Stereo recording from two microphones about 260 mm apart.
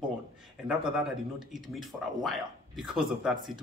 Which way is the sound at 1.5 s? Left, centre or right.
Centre.